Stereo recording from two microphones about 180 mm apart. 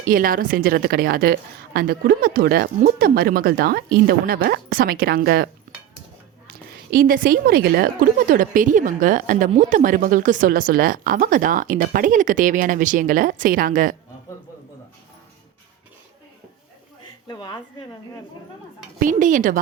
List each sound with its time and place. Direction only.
0.1 s a woman's voice: 50° right (ahead or behind)
6.5 s a woman's voice: 55° right (ahead or behind)
17.2 s speech: 25° left (ahead or behind)
18.9 s a woman's voice: 45° right (ahead or behind)